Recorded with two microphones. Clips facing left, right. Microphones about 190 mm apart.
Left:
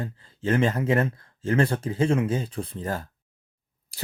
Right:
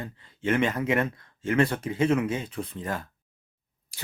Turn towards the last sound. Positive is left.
turn(degrees=35)  # may be behind; listen again after turning